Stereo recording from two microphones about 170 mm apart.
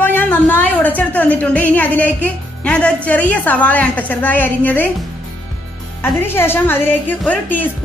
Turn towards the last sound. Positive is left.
turn(degrees=10)  # may be behind; listen again after turning